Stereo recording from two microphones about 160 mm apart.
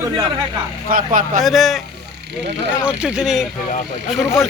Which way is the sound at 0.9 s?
60° right (ahead or behind).